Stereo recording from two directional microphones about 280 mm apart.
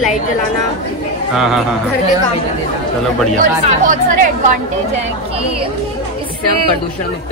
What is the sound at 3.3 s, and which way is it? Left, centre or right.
Speech, right.